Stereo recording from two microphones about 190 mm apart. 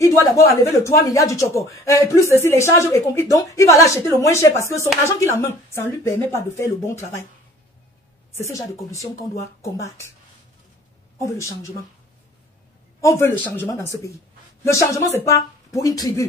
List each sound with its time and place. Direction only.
0.0 s a sound: 15° left (ahead or behind)
0.6 s a woman's voice: 15° left (ahead or behind)
8.4 s a woman's voice: 15° left (ahead or behind)
13.0 s a woman's voice: 15° left (ahead or behind)